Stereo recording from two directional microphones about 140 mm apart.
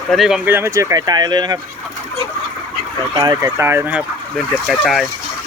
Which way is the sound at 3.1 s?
25° right (ahead or behind).